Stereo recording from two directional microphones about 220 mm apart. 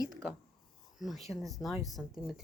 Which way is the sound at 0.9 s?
Centre (ahead or behind).